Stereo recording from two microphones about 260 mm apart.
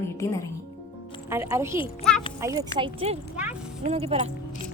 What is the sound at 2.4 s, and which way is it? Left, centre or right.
Speech, centre.